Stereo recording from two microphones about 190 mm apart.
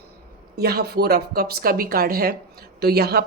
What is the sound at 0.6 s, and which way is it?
Speech, 55° right (ahead or behind).